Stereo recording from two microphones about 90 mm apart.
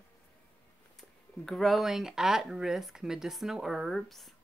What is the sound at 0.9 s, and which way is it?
Speech, 5° left (ahead or behind).